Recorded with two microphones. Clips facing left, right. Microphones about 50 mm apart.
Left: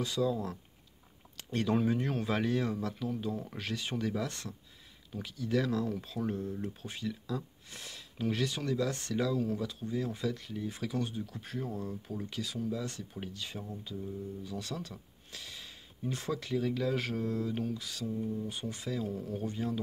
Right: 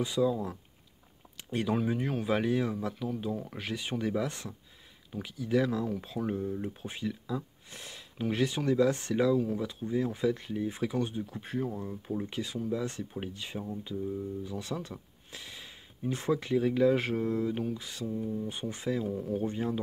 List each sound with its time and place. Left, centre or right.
0.0 s speech: centre
18.0 s speech: centre
18.5 s speech: right
19.4 s speech: right